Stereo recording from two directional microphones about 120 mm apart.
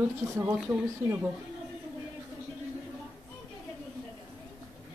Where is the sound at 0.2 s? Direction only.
25° right (ahead or behind).